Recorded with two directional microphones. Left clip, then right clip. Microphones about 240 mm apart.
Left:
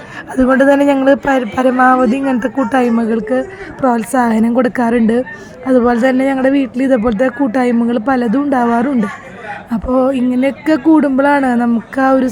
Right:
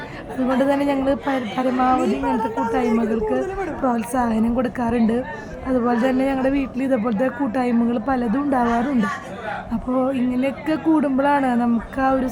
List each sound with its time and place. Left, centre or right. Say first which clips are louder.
0.3 s speech: left 10 dB; left
9.6 s speech: left 10 dB; left